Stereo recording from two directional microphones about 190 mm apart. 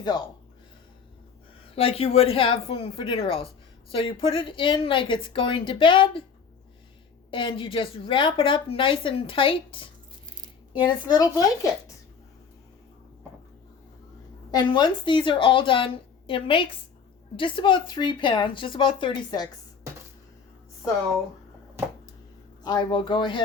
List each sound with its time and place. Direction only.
1.6 s a woman's voice: 30° left (ahead or behind)
7.3 s a woman's voice: 25° left (ahead or behind)
14.5 s a woman's voice: 25° left (ahead or behind)
22.6 s a woman's voice: 20° left (ahead or behind)